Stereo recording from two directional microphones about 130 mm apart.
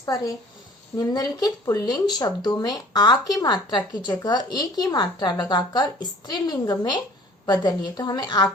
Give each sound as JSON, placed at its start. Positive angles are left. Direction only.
{"t": 0.9, "sound": "speech", "side_deg": 30}